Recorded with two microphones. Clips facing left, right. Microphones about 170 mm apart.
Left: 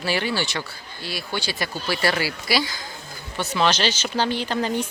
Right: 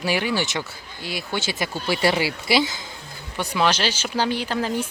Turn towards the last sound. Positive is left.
turn(degrees=-5)  # may be behind; listen again after turning